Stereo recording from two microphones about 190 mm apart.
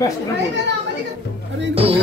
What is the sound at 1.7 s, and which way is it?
Music, 30° right (ahead or behind).